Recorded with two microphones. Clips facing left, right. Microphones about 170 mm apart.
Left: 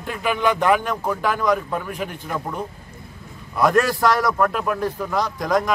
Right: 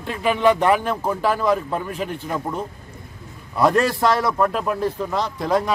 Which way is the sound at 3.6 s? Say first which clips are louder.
Even; 30° right (ahead or behind).